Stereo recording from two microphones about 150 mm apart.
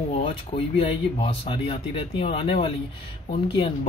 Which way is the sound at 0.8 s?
40° left (ahead or behind).